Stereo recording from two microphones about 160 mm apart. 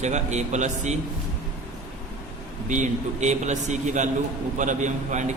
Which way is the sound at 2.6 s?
50° right (ahead or behind).